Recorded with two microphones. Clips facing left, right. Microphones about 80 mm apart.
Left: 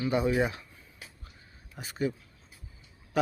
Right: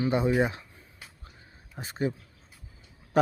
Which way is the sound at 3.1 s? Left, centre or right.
Right.